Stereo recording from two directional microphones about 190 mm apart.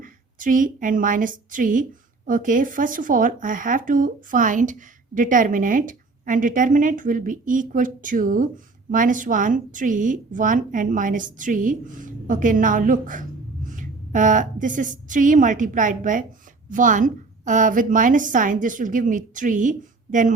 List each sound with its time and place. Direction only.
0.0 s a woman's voice: 45° right (ahead or behind)